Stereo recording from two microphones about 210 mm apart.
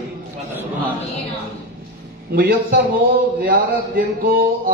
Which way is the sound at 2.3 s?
45° right (ahead or behind).